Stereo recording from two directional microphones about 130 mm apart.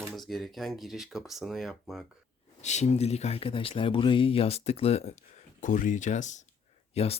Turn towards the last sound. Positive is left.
turn(degrees=55)  # may be behind; listen again after turning